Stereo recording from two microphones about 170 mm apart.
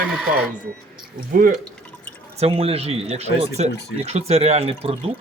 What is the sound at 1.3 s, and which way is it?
Speech, 55° right (ahead or behind).